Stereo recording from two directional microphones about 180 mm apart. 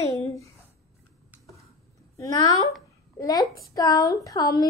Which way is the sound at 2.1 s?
20° left (ahead or behind).